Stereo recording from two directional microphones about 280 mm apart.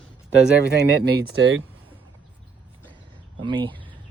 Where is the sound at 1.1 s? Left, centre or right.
Right.